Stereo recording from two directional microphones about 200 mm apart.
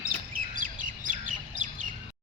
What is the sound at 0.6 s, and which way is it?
Chirp, 40° right (ahead or behind).